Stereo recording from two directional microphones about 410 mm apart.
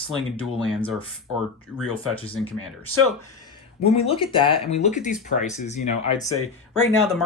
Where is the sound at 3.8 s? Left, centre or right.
Centre.